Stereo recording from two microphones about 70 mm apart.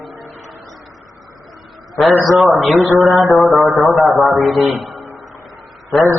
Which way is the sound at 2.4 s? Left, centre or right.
Centre.